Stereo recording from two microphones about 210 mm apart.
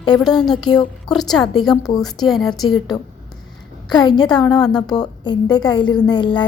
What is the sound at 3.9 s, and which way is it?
A woman's voice, 20° left (ahead or behind).